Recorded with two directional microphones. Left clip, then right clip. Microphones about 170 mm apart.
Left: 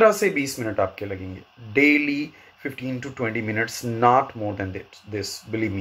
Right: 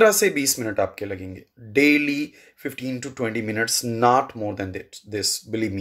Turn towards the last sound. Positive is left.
turn(degrees=-25)  # may be behind; listen again after turning